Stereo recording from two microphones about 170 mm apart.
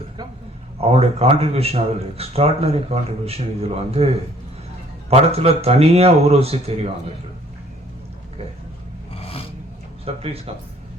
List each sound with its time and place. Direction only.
0.8 s a man's voice: 35° right (ahead or behind)
9.1 s a sound: 35° left (ahead or behind)
10.2 s a man's voice: 35° right (ahead or behind)